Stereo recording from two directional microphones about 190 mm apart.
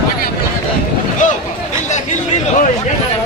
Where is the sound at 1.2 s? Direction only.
40° left (ahead or behind).